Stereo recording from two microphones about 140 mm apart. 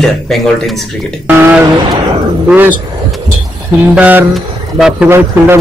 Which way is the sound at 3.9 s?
10° right (ahead or behind).